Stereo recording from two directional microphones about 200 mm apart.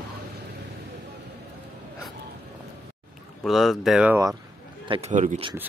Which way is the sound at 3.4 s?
Centre (ahead or behind).